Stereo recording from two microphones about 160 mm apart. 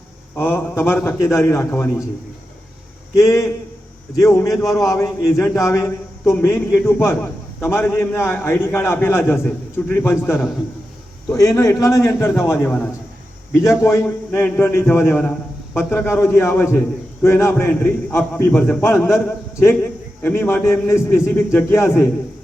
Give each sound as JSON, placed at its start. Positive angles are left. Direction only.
{"t": 0.3, "sound": "a man's voice", "side_deg": 15}
{"t": 3.2, "sound": "a man's voice", "side_deg": 20}